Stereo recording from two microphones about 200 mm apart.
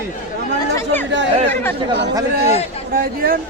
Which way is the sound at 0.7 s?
10° left (ahead or behind).